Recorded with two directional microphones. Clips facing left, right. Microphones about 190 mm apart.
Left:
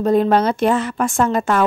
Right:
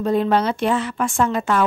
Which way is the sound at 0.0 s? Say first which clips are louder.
Left 3 dB; 45° left (ahead or behind).